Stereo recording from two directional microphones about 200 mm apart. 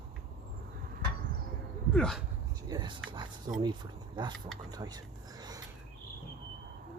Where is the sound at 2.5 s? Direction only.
20° right (ahead or behind).